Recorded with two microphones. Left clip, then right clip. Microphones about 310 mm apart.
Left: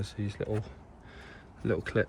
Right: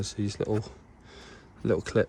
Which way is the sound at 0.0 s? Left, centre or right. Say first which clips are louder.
Right 5 dB; centre.